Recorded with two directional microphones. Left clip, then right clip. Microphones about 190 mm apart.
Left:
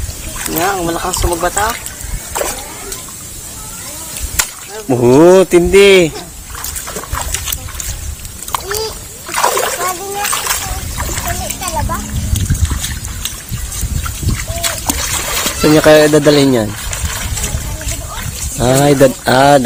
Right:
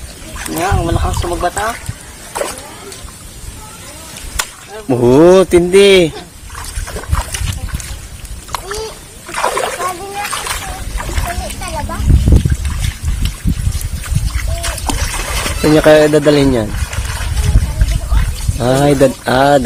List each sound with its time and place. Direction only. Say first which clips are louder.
0.3 s boat: left 2 dB; 10° left (ahead or behind)
0.6 s speech: left 1 dB; 20° left (ahead or behind)
2.3 s vehicle: left 1 dB; centre (ahead or behind)
4.4 s a sound: left 3 dB; 15° left (ahead or behind)
4.9 s speech: even; 10° right (ahead or behind)
6.6 s dog: left 2 dB; centre (ahead or behind)
9.3 s splash: left 2 dB; 25° left (ahead or behind)
10.7 s a sound: left 2 dB; 5° left (ahead or behind)
14.3 s a sound: left 3 dB; centre (ahead or behind)
18.9 s speech: left 2 dB; 10° left (ahead or behind)